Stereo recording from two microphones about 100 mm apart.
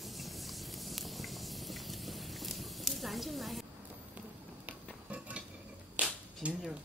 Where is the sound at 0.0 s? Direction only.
Centre (ahead or behind).